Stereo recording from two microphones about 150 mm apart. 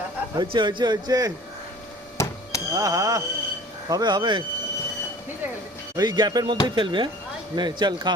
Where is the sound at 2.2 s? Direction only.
20° left (ahead or behind).